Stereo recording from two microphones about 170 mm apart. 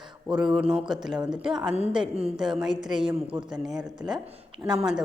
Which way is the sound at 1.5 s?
25° right (ahead or behind).